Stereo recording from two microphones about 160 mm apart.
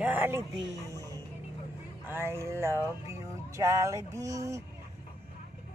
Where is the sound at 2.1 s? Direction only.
15° right (ahead or behind).